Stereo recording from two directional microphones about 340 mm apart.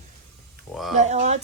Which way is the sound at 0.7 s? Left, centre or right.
Centre.